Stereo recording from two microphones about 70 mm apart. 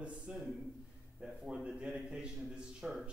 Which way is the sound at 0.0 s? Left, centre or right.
Centre.